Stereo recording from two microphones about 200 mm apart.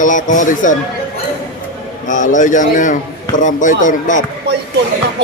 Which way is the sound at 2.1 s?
40° left (ahead or behind).